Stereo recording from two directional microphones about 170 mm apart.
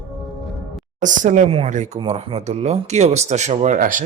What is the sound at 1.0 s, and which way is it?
Speech, 50° right (ahead or behind).